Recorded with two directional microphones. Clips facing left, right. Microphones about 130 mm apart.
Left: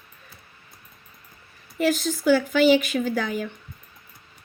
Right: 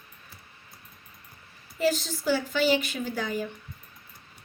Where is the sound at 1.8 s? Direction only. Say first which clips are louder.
Left 3 dB; 65° left (ahead or behind).